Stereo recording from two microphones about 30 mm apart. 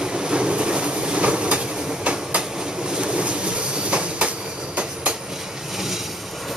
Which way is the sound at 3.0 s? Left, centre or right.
Right.